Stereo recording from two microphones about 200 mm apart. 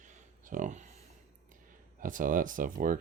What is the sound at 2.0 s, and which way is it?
Speech, 40° right (ahead or behind).